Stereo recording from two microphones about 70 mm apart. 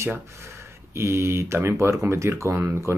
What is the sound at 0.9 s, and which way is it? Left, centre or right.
Speech, right.